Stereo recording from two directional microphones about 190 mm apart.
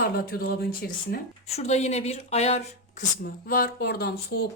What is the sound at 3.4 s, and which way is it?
Speech, 55° left (ahead or behind).